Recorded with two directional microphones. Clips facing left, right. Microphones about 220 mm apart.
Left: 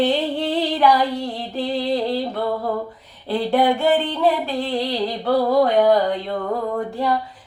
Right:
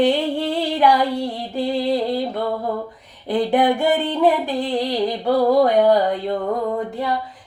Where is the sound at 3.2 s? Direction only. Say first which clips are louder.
Right 1 dB; 15° right (ahead or behind).